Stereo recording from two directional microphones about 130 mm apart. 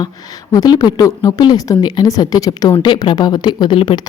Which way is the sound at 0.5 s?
30° left (ahead or behind).